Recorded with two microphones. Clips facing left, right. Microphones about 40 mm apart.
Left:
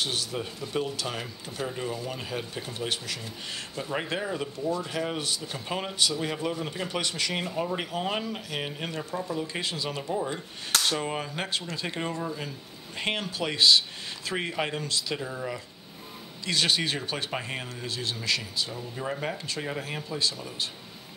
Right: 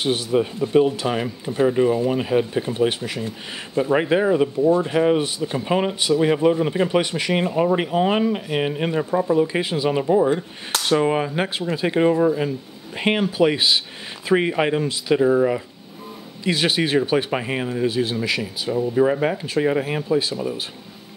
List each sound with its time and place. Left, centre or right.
0.0 s speech: right
10.7 s a sound: centre
11.0 s speech: right
15.2 s speech: right
16.4 s speech: centre
18.9 s speech: right
19.3 s speech: centre